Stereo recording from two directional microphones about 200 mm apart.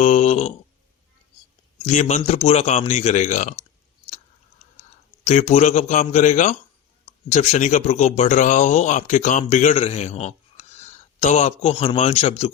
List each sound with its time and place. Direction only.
0.0 s a sound: 35° left (ahead or behind)
1.9 s speech: 35° left (ahead or behind)
5.2 s speech: 35° left (ahead or behind)